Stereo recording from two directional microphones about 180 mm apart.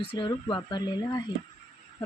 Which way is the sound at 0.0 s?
30° left (ahead or behind).